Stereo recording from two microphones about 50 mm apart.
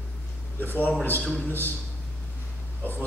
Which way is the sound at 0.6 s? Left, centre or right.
Left.